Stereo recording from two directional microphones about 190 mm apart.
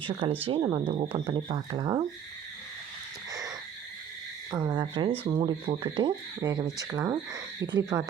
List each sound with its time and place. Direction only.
0.0 s speech: 30° right (ahead or behind)
4.5 s speech: 20° right (ahead or behind)